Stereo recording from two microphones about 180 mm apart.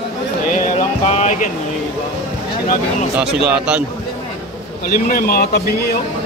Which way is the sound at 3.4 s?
5° right (ahead or behind).